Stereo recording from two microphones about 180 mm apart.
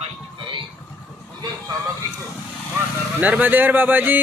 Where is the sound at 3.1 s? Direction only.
10° right (ahead or behind).